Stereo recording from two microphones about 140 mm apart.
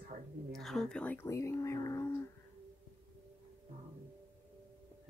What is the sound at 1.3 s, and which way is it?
Speech, 20° left (ahead or behind).